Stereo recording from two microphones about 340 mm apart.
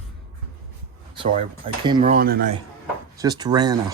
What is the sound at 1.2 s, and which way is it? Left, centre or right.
Speech, right.